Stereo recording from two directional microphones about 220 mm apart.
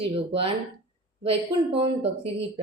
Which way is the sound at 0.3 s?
25° right (ahead or behind).